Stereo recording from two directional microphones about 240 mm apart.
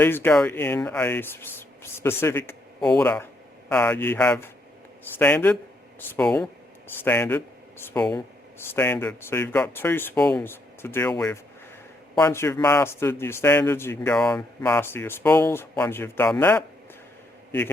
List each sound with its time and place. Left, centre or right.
0.0 s speech: centre